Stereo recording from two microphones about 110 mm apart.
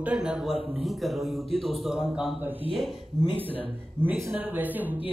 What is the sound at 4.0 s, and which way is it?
Speech, 20° right (ahead or behind).